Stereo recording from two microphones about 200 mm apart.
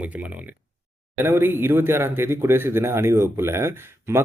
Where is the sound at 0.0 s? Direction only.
5° right (ahead or behind).